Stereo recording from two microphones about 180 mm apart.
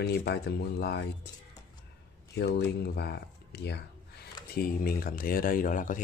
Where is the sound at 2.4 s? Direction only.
65° left (ahead or behind).